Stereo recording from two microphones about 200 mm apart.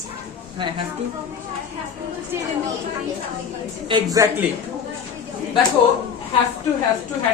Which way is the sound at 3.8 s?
20° right (ahead or behind).